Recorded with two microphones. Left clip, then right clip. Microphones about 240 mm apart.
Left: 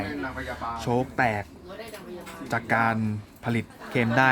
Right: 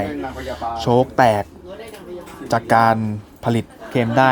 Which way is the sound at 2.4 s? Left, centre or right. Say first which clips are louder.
Right 10 dB; centre.